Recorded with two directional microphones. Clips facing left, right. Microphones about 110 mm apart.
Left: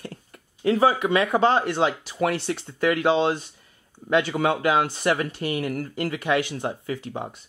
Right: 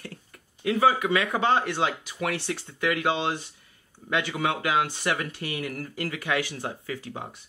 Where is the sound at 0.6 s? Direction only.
35° left (ahead or behind).